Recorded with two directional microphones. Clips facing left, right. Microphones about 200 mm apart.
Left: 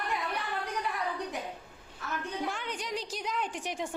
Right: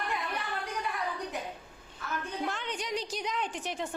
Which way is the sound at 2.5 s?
10° left (ahead or behind).